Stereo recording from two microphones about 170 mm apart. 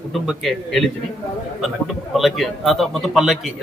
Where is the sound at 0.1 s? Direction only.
Centre (ahead or behind).